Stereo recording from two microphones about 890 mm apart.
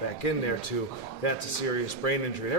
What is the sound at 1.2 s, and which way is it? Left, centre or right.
Speech, left.